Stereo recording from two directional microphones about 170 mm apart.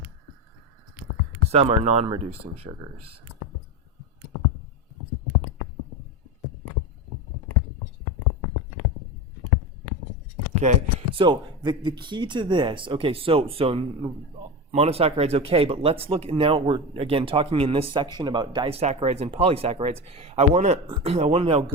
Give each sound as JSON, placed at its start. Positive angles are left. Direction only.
{"t": 1.5, "sound": "speech", "side_deg": -40}
{"t": 10.5, "sound": "a sound", "side_deg": -45}
{"t": 11.1, "sound": "speech", "side_deg": -30}